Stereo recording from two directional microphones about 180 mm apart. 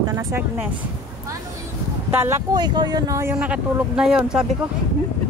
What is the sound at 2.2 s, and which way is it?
Speech, 20° right (ahead or behind).